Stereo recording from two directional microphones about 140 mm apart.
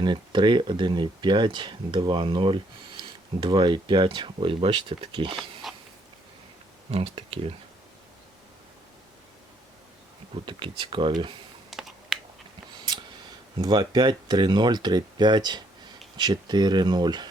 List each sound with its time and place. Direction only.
0.0 s speech: 35° right (ahead or behind)
5.6 s a sound: centre (ahead or behind)
6.9 s speech: 45° right (ahead or behind)
10.4 s speech: 35° right (ahead or behind)
11.7 s computer keyboard: centre (ahead or behind)
13.6 s speech: 30° right (ahead or behind)